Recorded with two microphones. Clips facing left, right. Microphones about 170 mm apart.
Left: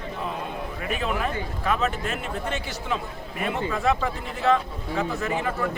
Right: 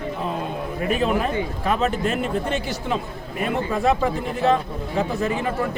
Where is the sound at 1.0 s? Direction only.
30° right (ahead or behind).